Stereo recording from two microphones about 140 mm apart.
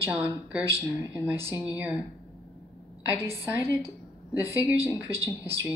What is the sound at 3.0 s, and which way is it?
Speech, 15° right (ahead or behind).